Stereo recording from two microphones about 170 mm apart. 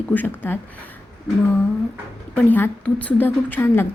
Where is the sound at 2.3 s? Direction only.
10° left (ahead or behind).